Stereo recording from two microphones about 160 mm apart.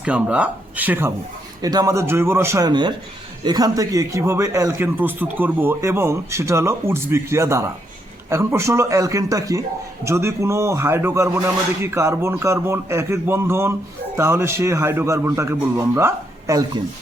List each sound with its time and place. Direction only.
0.0 s a man's voice: 10° right (ahead or behind)